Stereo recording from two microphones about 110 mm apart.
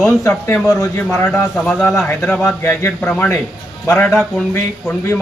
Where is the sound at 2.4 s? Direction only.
25° left (ahead or behind).